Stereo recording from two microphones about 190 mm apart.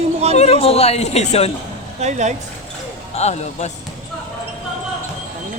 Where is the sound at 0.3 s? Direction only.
35° left (ahead or behind).